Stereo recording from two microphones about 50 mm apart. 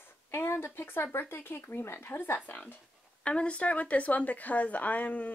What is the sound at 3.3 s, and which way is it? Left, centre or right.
A woman's voice, left.